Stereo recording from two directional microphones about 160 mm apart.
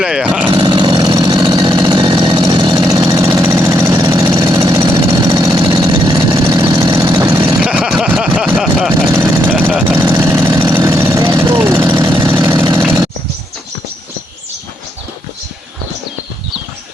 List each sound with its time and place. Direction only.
0.0 s speech: 5° right (ahead or behind)
0.5 s chainsaw: 30° right (ahead or behind)
7.6 s a sound: 5° right (ahead or behind)
8.5 s vehicle: 5° right (ahead or behind)
9.0 s vehicle: 15° right (ahead or behind)